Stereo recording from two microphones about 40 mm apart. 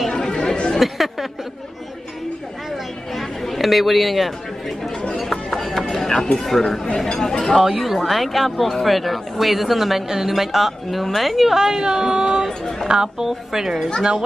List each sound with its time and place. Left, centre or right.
0.1 s chatter: left
0.7 s chatter: centre
3.2 s chatter: centre
5.5 s mechanisms: centre
6.3 s speech: centre
7.6 s speech: centre
11.6 s speech: centre